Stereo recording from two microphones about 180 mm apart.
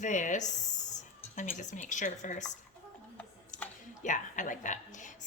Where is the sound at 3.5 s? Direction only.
45° left (ahead or behind).